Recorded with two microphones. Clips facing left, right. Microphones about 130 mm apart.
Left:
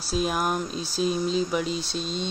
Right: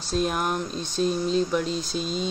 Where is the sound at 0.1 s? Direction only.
Centre (ahead or behind).